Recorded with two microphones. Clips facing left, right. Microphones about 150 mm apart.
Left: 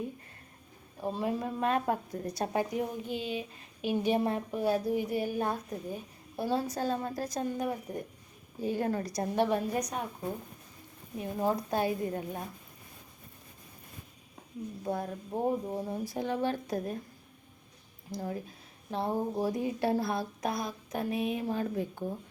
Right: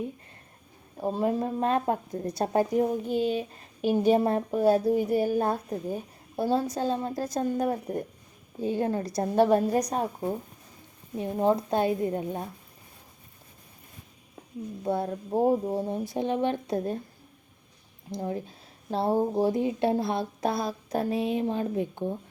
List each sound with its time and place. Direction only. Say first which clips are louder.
0.9 s speech: right 6 dB; 35° right (ahead or behind)
2.5 s speech: right 9 dB; 40° right (ahead or behind)
8.6 s speech: right 4 dB; 25° right (ahead or behind)
9.3 s speech: right 7 dB; 40° right (ahead or behind); by 12.5 s 25° right (ahead or behind)
14.8 s speech: right 6 dB; 30° right (ahead or behind)
18.1 s speech: right 5 dB; 25° right (ahead or behind)